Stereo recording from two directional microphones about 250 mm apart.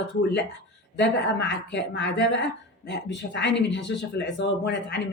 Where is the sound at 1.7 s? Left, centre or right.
Left.